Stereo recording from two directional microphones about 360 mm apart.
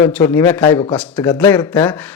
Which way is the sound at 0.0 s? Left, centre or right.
Centre.